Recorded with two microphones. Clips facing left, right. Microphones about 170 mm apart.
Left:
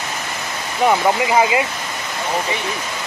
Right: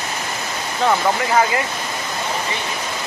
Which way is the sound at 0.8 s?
15° left (ahead or behind).